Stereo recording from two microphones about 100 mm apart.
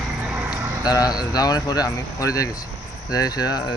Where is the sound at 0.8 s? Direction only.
40° left (ahead or behind).